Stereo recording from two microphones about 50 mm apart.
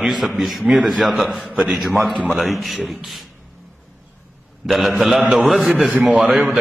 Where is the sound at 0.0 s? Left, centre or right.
Centre.